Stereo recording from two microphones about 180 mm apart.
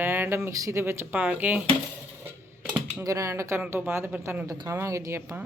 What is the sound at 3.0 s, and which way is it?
Speech, 15° right (ahead or behind).